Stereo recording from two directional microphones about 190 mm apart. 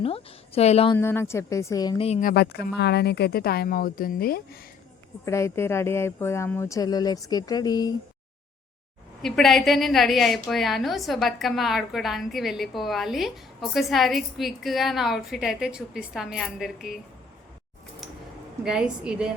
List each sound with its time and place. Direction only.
0.0 s a woman's voice: 30° left (ahead or behind)
0.9 s speech: 10° left (ahead or behind)
2.2 s speech: 55° left (ahead or behind)
5.2 s speech: 15° left (ahead or behind)
9.2 s a woman's voice: centre (ahead or behind)
18.6 s a woman's voice: 5° right (ahead or behind)